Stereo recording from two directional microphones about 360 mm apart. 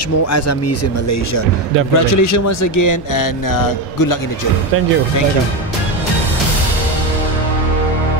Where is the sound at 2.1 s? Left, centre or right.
Left.